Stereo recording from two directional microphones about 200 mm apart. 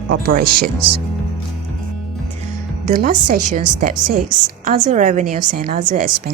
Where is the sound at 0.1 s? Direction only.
50° right (ahead or behind).